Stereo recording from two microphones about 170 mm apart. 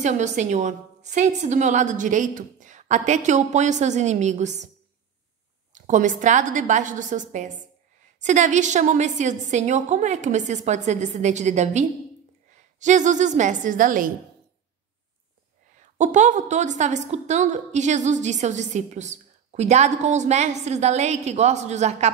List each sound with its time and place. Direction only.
0.0 s a woman's voice: 45° right (ahead or behind)
5.8 s a woman's voice: 45° right (ahead or behind)
15.8 s a woman's voice: 45° right (ahead or behind)